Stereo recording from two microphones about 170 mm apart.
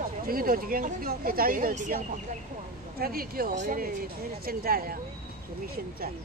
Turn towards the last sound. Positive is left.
turn(degrees=-65)  # may be behind; listen again after turning